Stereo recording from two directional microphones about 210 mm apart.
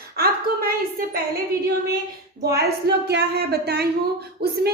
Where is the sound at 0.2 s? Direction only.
45° right (ahead or behind).